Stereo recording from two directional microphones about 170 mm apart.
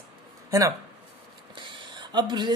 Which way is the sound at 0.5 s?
15° right (ahead or behind).